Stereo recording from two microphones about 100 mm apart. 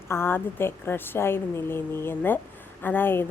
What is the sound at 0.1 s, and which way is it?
A woman's voice, 25° left (ahead or behind).